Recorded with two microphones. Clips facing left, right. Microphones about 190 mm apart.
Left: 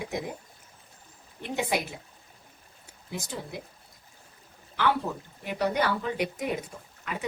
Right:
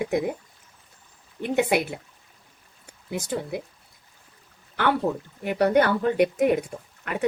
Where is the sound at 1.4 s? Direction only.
60° right (ahead or behind).